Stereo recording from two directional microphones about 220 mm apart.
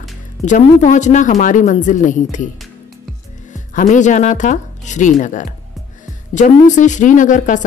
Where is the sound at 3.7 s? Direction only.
35° left (ahead or behind).